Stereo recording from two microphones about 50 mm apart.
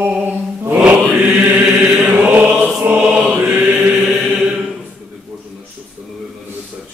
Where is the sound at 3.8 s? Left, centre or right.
Centre.